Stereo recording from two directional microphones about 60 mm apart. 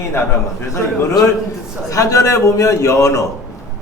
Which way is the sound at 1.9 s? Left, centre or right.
Left.